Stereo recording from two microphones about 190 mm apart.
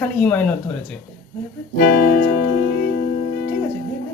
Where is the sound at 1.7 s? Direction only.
50° left (ahead or behind).